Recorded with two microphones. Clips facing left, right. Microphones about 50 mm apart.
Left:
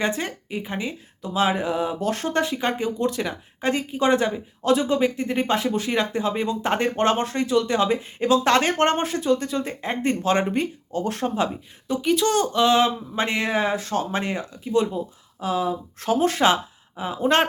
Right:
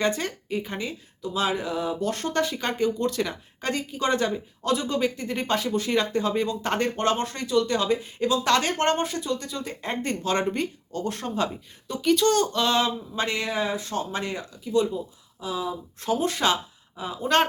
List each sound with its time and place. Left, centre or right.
0.0 s speech: left
1.3 s speech: left
7.0 s speech: left
9.8 s speech: centre
15.4 s speech: left